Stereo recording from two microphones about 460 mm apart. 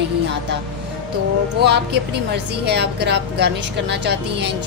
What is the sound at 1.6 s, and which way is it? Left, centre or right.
Speech, right.